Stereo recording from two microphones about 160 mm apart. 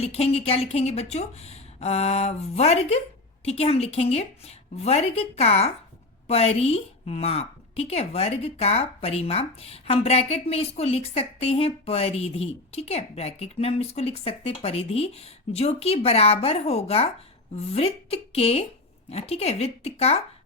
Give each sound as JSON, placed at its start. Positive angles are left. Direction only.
{"t": 0.0, "sound": "a woman's voice", "side_deg": 40}